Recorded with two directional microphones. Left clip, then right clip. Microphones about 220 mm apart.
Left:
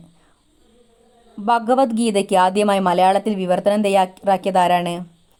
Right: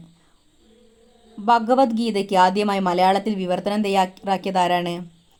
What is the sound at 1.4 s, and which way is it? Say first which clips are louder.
Speech: even; 20° left (ahead or behind).